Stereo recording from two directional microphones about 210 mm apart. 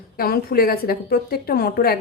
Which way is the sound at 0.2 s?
45° left (ahead or behind).